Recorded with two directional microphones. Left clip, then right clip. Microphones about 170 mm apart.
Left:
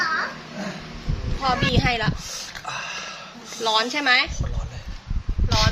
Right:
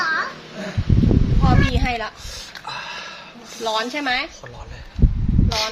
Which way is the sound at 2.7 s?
30° right (ahead or behind).